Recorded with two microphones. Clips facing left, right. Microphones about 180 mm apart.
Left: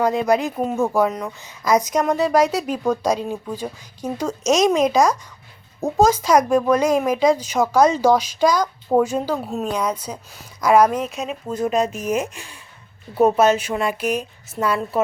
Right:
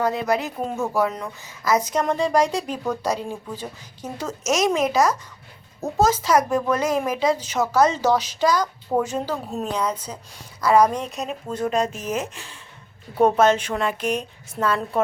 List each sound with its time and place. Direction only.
0.0 s a woman's voice: 20° left (ahead or behind)